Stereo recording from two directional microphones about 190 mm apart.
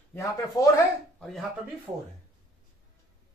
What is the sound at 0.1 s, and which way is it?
Speech, 15° left (ahead or behind).